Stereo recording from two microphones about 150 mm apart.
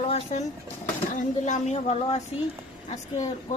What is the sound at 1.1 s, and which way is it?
A woman's voice, 55° left (ahead or behind).